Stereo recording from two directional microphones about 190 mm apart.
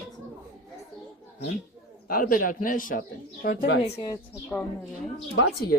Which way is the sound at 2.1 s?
50° left (ahead or behind).